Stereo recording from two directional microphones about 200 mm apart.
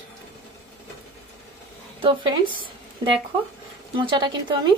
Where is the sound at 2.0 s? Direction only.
25° right (ahead or behind).